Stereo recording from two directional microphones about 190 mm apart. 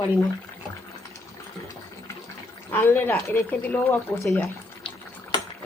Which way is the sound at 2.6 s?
10° left (ahead or behind).